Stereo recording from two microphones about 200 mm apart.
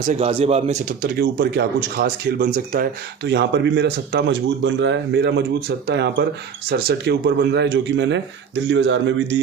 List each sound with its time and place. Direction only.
0.1 s speech: 30° right (ahead or behind); by 2.8 s 45° right (ahead or behind)
3.2 s speech: 60° right (ahead or behind)